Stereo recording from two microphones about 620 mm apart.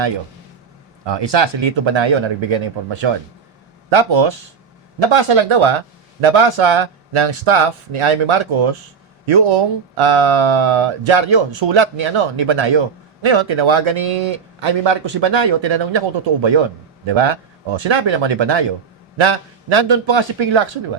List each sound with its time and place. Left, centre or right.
1.0 s speech: right
3.8 s speech: right